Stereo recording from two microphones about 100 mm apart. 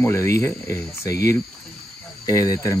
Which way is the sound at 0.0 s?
30° left (ahead or behind).